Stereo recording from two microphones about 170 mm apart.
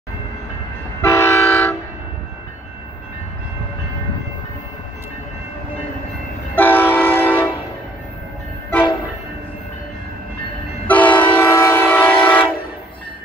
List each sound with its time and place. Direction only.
1.0 s train: 15° left (ahead or behind)
6.5 s train: 10° left (ahead or behind)
10.9 s train: 10° left (ahead or behind)